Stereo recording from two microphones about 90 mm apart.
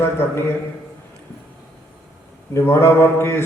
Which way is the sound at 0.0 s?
30° left (ahead or behind).